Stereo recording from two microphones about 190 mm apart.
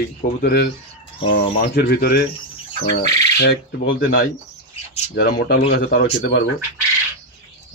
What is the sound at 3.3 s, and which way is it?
Speech, 60° left (ahead or behind).